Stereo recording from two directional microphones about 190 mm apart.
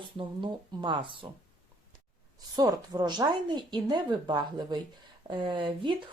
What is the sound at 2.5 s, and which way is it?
Speech, 20° right (ahead or behind).